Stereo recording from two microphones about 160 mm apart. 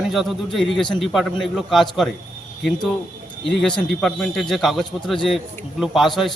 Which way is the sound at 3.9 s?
5° left (ahead or behind).